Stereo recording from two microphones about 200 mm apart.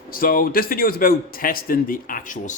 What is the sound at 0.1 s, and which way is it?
A man's voice, 45° left (ahead or behind).